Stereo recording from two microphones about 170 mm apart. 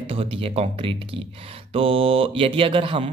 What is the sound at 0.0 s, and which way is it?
Speech, 35° right (ahead or behind).